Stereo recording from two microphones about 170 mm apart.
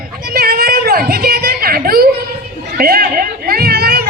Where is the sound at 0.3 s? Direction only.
65° right (ahead or behind).